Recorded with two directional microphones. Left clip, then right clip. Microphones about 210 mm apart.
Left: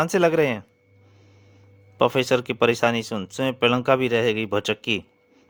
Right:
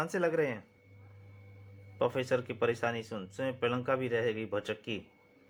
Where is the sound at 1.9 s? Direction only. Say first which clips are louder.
Left 11 dB; 55° left (ahead or behind).